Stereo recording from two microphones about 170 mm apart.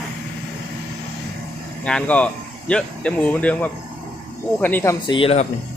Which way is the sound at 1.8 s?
5° left (ahead or behind).